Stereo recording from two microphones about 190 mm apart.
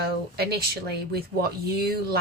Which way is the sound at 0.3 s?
55° right (ahead or behind).